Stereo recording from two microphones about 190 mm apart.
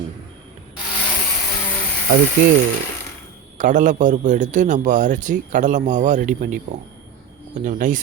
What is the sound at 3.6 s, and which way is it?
Speech, 40° right (ahead or behind).